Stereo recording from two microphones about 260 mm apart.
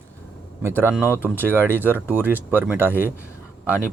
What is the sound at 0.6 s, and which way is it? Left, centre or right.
Speech, centre.